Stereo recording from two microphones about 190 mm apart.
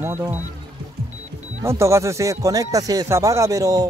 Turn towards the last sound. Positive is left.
turn(degrees=-20)  # may be behind; listen again after turning